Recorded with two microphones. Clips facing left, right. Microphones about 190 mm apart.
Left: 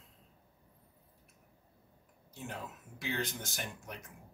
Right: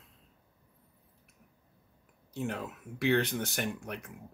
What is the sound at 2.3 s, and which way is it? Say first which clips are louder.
Speech: right 8 dB; 65° right (ahead or behind).